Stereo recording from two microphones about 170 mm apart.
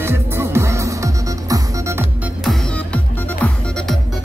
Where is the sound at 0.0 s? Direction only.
15° right (ahead or behind).